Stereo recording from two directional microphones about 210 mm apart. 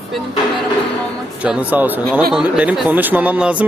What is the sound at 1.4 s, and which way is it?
Speech, 5° right (ahead or behind).